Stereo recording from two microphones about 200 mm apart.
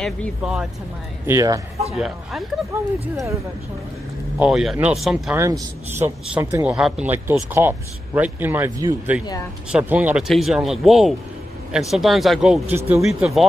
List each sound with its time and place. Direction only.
0.0 s speech: centre (ahead or behind)
1.2 s a man's voice: 15° right (ahead or behind)
2.0 s speech: centre (ahead or behind)
4.4 s speech: 5° right (ahead or behind)
5.4 s a man's voice: 15° right (ahead or behind)